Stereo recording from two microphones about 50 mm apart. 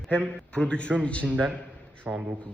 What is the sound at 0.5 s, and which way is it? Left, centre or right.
Speech, left.